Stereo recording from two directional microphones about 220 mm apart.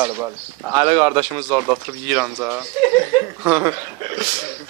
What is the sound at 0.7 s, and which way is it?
Speech, 20° right (ahead or behind).